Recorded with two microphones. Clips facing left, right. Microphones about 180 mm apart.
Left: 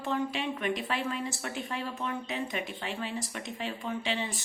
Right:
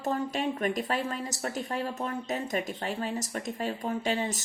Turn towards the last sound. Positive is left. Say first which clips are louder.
# right 4 dB
turn(degrees=-45)  # may be behind; listen again after turning